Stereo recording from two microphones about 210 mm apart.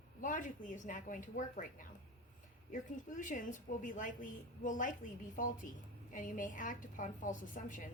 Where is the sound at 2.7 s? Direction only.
40° left (ahead or behind).